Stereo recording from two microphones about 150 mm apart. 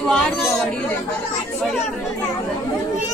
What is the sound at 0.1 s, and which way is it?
Chatter, 5° left (ahead or behind).